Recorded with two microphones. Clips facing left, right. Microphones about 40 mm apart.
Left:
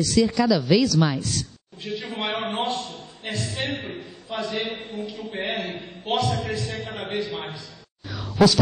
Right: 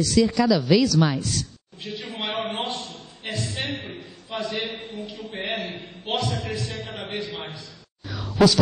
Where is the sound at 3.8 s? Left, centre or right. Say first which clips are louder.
Left 3 dB; centre.